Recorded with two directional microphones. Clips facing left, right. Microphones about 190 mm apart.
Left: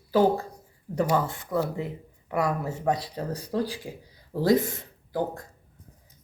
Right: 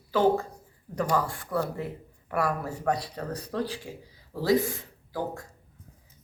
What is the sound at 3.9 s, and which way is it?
Speech, 15° left (ahead or behind).